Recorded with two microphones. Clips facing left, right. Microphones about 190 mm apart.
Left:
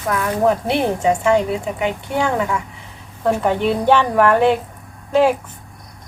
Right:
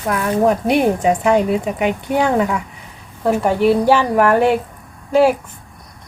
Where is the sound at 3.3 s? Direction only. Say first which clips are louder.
Right 3 dB; 5° right (ahead or behind).